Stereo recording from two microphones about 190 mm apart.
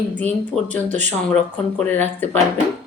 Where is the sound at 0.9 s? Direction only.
40° right (ahead or behind).